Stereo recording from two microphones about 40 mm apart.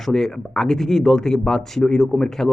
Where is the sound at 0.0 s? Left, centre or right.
Centre.